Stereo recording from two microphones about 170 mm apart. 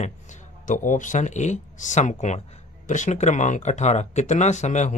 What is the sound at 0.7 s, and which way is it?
Speech, 50° left (ahead or behind).